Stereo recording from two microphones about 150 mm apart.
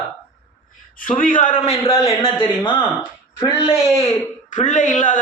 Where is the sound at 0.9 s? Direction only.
65° left (ahead or behind).